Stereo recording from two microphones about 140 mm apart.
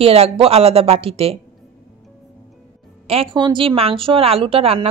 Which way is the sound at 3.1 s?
40° right (ahead or behind).